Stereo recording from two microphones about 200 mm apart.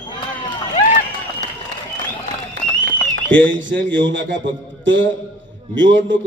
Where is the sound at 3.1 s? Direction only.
65° right (ahead or behind).